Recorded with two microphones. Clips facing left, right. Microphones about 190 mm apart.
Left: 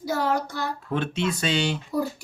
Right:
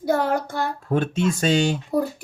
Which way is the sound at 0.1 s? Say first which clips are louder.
Right 4 dB; 55° right (ahead or behind).